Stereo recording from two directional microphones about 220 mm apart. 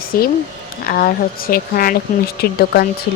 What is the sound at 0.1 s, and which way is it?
Speech, 40° left (ahead or behind).